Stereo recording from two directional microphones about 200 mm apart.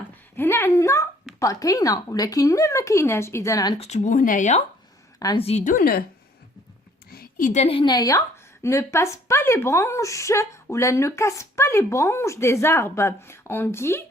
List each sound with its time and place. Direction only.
0.3 s speech: 10° left (ahead or behind)
3.8 s speech: 35° left (ahead or behind)
5.2 s a woman's voice: 20° left (ahead or behind)
5.5 s speech: 40° left (ahead or behind)
7.1 s a woman's voice: 45° left (ahead or behind); by 14.0 s 10° left (ahead or behind)